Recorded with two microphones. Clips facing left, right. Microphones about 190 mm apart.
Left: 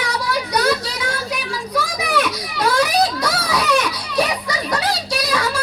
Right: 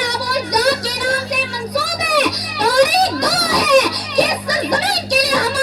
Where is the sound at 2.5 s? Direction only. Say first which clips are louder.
Right 5 dB; 70° right (ahead or behind).